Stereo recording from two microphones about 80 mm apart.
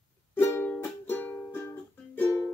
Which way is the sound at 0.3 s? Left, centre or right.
Left.